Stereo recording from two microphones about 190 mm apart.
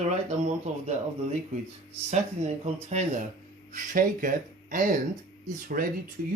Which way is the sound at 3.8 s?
45° right (ahead or behind).